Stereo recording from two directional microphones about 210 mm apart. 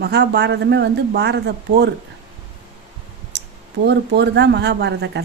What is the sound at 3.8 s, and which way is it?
Speech, 50° right (ahead or behind).